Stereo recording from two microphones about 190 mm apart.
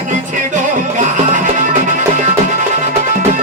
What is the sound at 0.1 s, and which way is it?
Music, 40° right (ahead or behind).